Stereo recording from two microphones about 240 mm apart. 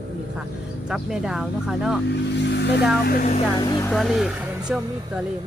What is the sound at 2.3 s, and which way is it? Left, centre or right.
Speech, left.